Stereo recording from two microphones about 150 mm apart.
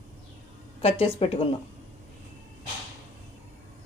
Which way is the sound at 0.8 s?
40° left (ahead or behind).